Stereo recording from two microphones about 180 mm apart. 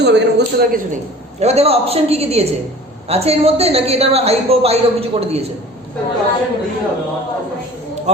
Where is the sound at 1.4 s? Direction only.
35° right (ahead or behind).